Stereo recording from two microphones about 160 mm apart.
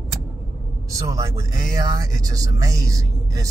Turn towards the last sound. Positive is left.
turn(degrees=-20)  # may be behind; listen again after turning